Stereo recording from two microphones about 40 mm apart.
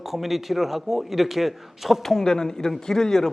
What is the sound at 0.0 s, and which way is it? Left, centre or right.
A man's voice, centre.